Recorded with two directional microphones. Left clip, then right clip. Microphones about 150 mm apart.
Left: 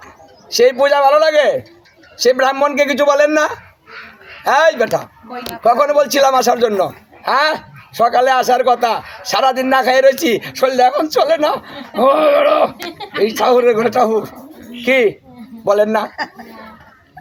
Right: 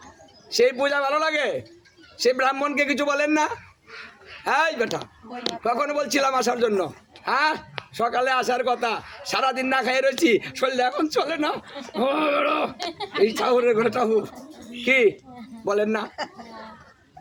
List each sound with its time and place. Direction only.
0.5 s a man's voice: 25° right (ahead or behind)
12.7 s speech: centre (ahead or behind)
13.4 s a man's voice: 20° right (ahead or behind)